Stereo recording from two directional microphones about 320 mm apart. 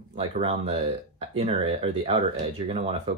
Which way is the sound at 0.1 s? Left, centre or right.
Centre.